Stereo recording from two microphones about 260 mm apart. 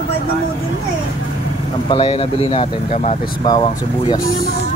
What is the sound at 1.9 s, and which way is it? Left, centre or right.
Speech, left.